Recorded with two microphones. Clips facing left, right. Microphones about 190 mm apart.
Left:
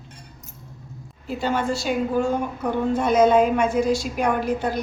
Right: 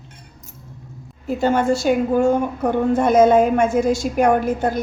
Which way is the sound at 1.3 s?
45° right (ahead or behind).